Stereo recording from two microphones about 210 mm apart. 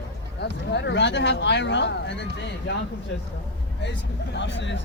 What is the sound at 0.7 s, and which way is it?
Speech, 60° left (ahead or behind).